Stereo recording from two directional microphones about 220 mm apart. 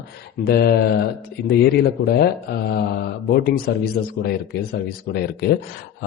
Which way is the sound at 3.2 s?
45° left (ahead or behind).